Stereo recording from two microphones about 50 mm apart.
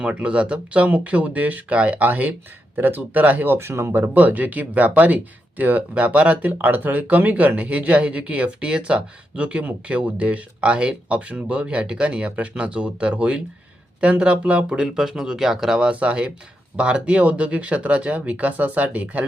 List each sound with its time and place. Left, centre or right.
0.0 s speech: right
4.0 s speech: right; by 15.9 s centre
15.9 s speech: right